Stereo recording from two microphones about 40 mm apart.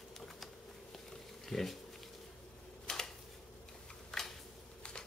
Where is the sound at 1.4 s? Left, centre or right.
Centre.